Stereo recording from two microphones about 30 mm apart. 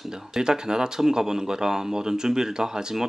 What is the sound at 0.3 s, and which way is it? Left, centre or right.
Speech, right.